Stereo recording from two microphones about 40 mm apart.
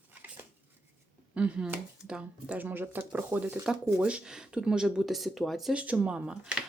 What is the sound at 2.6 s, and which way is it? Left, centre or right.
Speech, right.